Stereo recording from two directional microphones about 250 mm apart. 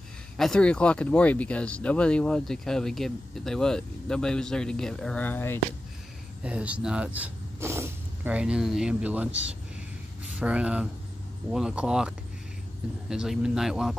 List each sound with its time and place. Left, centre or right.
0.4 s speech: centre
6.4 s speech: centre
10.4 s speech: centre
13.1 s speech: centre